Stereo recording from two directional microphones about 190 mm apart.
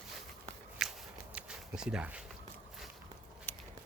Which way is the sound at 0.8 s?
Centre (ahead or behind).